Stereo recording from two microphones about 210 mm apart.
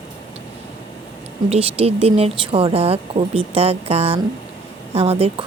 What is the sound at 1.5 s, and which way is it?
Speech, 30° right (ahead or behind).